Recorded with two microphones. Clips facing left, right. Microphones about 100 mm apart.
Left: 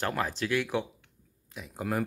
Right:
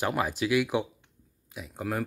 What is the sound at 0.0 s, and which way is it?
Speech, 10° right (ahead or behind).